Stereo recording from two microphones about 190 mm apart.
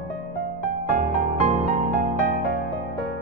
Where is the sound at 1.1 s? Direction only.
40° right (ahead or behind).